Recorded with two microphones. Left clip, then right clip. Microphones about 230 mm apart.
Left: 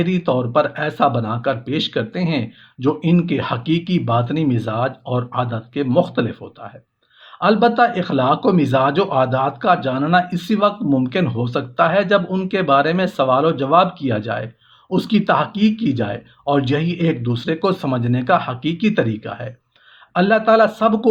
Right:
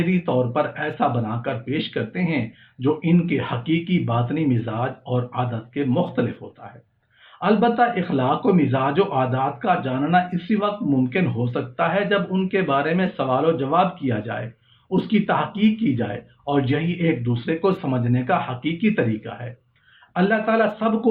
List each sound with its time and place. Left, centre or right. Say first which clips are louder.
0.0 s speech: left 3 dB; left
7.3 s speech: left 4 dB; left